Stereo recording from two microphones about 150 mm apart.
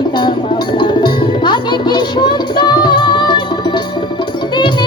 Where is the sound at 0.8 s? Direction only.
30° left (ahead or behind).